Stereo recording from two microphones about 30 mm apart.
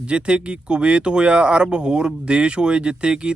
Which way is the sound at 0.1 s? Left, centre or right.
Right.